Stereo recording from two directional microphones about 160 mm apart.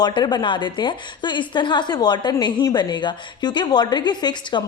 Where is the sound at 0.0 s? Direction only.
25° left (ahead or behind).